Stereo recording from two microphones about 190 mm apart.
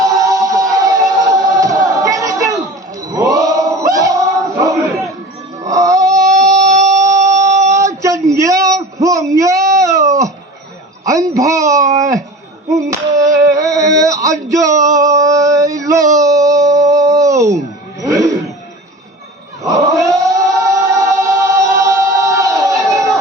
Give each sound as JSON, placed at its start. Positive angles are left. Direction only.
{"t": 0.0, "sound": "music", "side_deg": -20}
{"t": 3.1, "sound": "chant", "side_deg": -15}
{"t": 5.6, "sound": "a sound", "side_deg": -15}
{"t": 12.6, "sound": "clapping", "side_deg": -15}
{"t": 13.4, "sound": "male singing", "side_deg": -15}
{"t": 16.1, "sound": "howl", "side_deg": -15}
{"t": 19.6, "sound": "a sound", "side_deg": -15}
{"t": 20.6, "sound": "music", "side_deg": -15}